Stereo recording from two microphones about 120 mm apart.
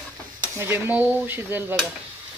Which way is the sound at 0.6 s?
15° right (ahead or behind).